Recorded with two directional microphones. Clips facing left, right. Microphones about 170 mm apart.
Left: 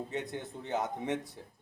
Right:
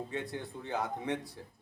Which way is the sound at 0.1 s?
20° left (ahead or behind).